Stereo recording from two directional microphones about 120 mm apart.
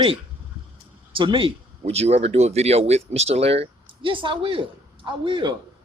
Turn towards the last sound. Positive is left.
turn(degrees=-40)  # may be behind; listen again after turning